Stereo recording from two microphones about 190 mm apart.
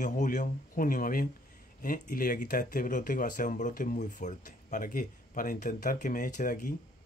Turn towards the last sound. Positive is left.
turn(degrees=40)  # may be behind; listen again after turning